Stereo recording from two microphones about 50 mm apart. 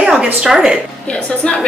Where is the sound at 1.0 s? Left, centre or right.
Left.